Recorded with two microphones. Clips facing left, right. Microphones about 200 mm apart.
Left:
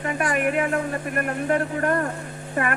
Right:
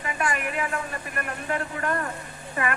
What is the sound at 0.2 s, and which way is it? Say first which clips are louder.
Speech: left 6 dB; 55° left (ahead or behind).